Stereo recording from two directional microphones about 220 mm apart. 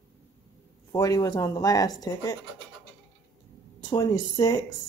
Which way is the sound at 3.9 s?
15° left (ahead or behind).